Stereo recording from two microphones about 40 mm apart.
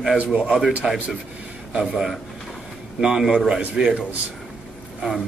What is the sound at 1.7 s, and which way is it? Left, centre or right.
Speech, centre.